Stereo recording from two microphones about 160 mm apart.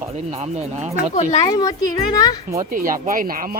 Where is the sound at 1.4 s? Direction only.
25° left (ahead or behind).